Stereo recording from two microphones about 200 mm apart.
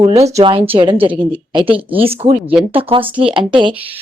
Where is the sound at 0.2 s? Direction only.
30° right (ahead or behind).